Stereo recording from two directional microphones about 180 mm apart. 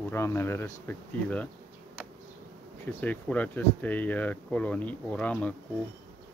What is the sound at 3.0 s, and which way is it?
Speech, 10° left (ahead or behind).